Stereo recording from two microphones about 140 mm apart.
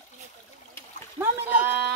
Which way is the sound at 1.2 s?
15° right (ahead or behind).